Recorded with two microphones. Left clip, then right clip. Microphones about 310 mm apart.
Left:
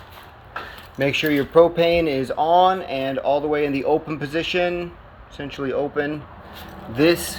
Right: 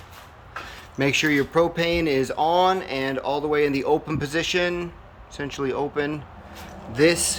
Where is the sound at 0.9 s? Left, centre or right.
Centre.